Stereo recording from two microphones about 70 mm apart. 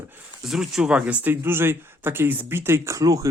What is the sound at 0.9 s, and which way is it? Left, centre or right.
Speech, centre.